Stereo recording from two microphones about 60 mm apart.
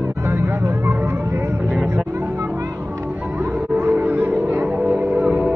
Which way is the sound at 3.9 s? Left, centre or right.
Right.